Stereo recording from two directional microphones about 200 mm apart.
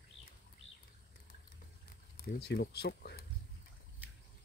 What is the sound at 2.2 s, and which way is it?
Speech, 50° left (ahead or behind).